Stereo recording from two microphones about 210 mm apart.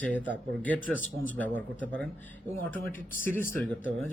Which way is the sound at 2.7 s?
10° left (ahead or behind).